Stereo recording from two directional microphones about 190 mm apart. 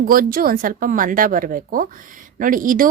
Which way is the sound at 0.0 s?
50° right (ahead or behind).